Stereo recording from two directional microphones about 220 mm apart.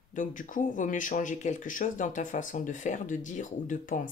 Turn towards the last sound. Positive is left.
turn(degrees=35)  # may be behind; listen again after turning